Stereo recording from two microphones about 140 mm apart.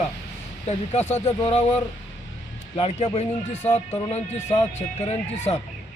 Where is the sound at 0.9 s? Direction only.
50° left (ahead or behind).